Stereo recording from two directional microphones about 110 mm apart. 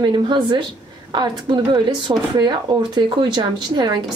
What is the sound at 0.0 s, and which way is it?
Speech, 45° right (ahead or behind).